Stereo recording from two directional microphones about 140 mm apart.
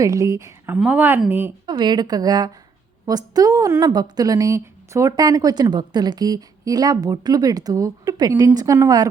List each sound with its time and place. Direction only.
0.0 s a woman's voice: 25° right (ahead or behind)
1.6 s a woman's voice: 30° right (ahead or behind)